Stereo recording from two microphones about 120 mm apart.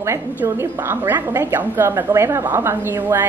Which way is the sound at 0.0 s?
20° right (ahead or behind).